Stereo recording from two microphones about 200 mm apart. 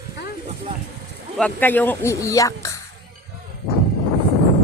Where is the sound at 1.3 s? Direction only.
5° left (ahead or behind).